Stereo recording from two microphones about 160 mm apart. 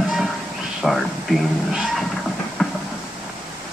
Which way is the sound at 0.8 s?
Centre (ahead or behind).